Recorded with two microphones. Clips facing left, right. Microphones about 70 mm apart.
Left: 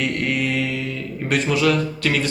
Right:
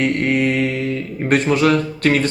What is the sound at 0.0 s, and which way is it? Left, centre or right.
Mantra, right.